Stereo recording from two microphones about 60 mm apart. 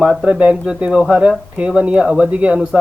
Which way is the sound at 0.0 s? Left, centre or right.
Centre.